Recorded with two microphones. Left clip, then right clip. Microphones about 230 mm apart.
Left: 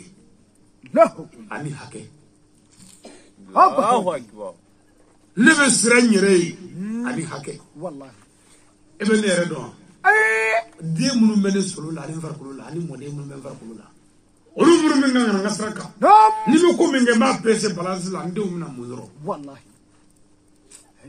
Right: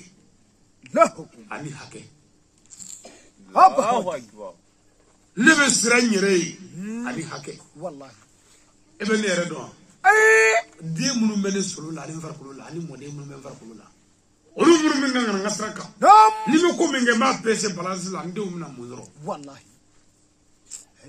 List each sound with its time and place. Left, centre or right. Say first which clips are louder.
0.8 s speech: left 3 dB; right
1.7 s a man's voice: left 3 dB; centre
3.0 s dog: left 2 dB; left
3.5 s a sound: even; right
3.9 s speech: left 4 dB; left
5.3 s a man's voice: left 1 dB; centre
8.9 s a man's voice: left 3 dB; centre
10.0 s a sound: right 2 dB; right
10.9 s a man's voice: left 4 dB; centre
14.5 s a man's voice: left 2 dB; centre
16.0 s music: even; right
16.4 s a man's voice: left 3 dB; centre
19.2 s a sound: left 3 dB; right